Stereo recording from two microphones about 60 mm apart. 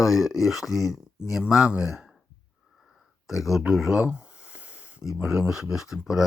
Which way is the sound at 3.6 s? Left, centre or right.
Centre.